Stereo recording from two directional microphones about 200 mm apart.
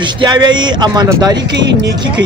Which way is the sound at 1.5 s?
60° right (ahead or behind).